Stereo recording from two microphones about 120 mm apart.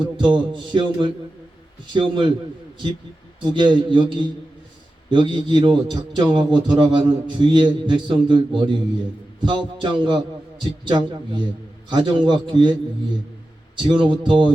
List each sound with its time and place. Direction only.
0.0 s a man's voice: 40° right (ahead or behind)
3.4 s a man's voice: 40° right (ahead or behind)
13.7 s a man's voice: 40° right (ahead or behind)